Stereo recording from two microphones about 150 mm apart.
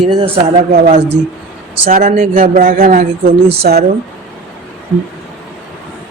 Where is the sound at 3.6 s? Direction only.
90° right.